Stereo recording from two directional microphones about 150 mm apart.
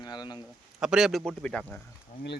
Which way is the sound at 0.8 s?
5° right (ahead or behind).